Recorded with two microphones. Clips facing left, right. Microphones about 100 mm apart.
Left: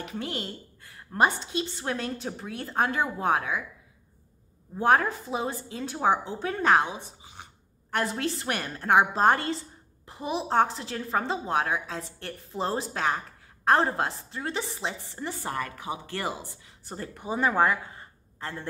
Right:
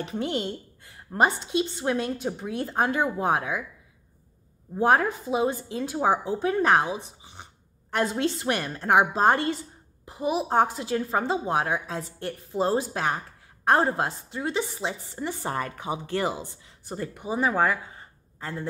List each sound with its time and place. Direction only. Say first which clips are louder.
0.0 s a woman's voice: right 5 dB; 25° right (ahead or behind)
5.3 s a woman's voice: right 6 dB; 20° right (ahead or behind)
7.9 s a woman's voice: right 3 dB; 20° right (ahead or behind)
10.0 s a woman's voice: right 4 dB; 5° right (ahead or behind)
17.3 s a woman's voice: even; 5° right (ahead or behind)